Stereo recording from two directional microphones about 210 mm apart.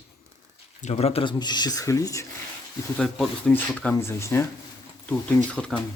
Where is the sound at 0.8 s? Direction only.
30° left (ahead or behind).